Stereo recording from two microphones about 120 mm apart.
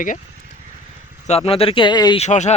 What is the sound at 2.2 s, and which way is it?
Speech, 75° left (ahead or behind).